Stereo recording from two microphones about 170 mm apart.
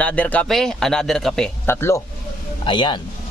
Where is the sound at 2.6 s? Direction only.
30° left (ahead or behind).